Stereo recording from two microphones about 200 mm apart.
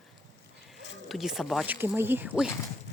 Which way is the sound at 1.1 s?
Centre (ahead or behind).